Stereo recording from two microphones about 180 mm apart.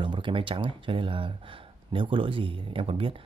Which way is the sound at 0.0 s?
25° right (ahead or behind).